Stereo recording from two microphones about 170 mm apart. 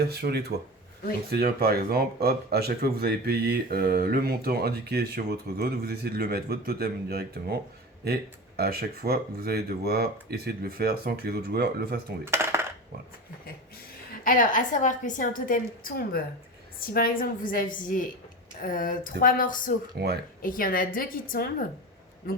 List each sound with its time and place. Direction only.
0.0 s speech: 70° right (ahead or behind)
1.3 s speech: 65° right (ahead or behind)
12.2 s dishes: 15° right (ahead or behind)
14.3 s a woman's voice: 50° left (ahead or behind)
20.0 s speech: 70° right (ahead or behind)
20.4 s a woman's voice: 55° left (ahead or behind)